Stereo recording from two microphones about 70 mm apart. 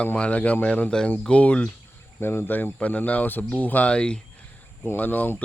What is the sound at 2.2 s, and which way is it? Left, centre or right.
Speech, left.